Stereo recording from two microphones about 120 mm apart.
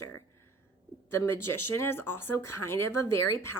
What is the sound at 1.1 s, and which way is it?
A woman's voice, 20° left (ahead or behind).